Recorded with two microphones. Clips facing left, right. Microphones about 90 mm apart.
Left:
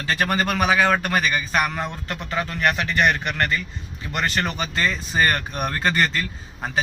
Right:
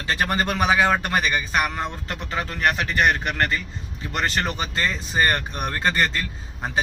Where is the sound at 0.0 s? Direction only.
25° right (ahead or behind).